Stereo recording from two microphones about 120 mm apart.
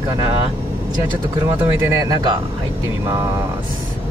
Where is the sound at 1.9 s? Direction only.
30° right (ahead or behind).